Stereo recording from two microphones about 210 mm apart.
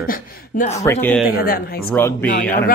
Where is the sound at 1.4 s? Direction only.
45° left (ahead or behind).